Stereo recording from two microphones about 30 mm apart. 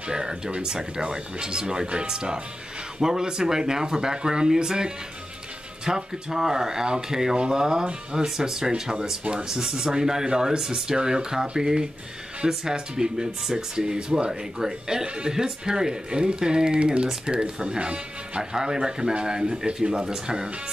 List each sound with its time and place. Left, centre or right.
0.0 s speech: right
15.0 s speech: right
18.4 s speech: right